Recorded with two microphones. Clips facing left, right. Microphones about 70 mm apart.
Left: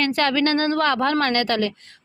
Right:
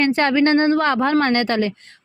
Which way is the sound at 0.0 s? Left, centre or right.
Right.